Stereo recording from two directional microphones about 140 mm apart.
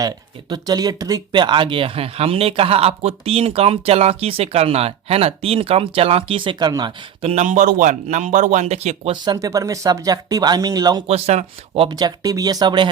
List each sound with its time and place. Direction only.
0.5 s speech: 30° right (ahead or behind)
7.2 s a man's voice: 50° right (ahead or behind)
9.2 s speech: 25° right (ahead or behind)
11.1 s speech: 50° right (ahead or behind)
11.9 s speech: 30° right (ahead or behind)